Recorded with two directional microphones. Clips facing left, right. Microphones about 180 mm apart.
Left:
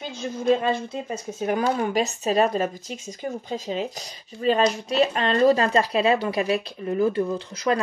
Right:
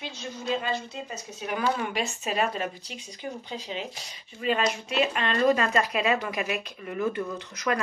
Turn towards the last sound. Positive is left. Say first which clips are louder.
# left 5 dB
turn(degrees=30)  # may be behind; listen again after turning